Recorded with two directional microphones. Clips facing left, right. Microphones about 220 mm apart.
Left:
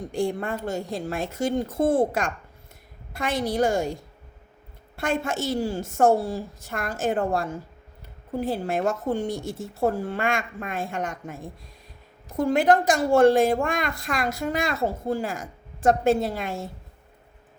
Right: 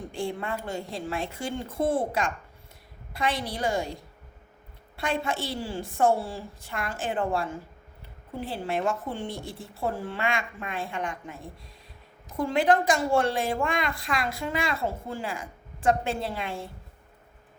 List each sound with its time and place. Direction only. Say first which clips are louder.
0.1 s a woman's voice: left 6 dB; 45° left (ahead or behind)
4.9 s a woman's voice: left 3 dB; 45° left (ahead or behind)
12.4 s a woman's voice: left 3 dB; 45° left (ahead or behind)